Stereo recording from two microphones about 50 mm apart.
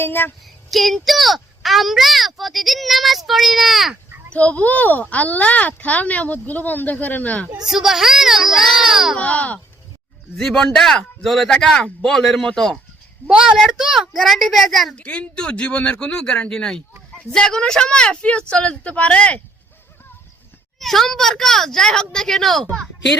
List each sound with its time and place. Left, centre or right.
0.0 s child singing: left
0.7 s a child's voice: centre
4.4 s speech: left
7.6 s a child's voice: centre
9.1 s speech: left
10.3 s a woman's voice: centre
11.5 s a woman's voice: centre
13.2 s a child's voice: centre
14.9 s speech: left
20.7 s a woman's voice: centre